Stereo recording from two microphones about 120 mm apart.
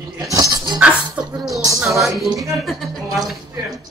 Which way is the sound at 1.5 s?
25° right (ahead or behind).